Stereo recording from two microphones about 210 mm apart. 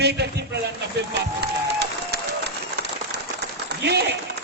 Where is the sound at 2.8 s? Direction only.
50° right (ahead or behind).